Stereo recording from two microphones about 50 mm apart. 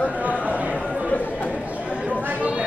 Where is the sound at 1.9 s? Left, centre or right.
Right.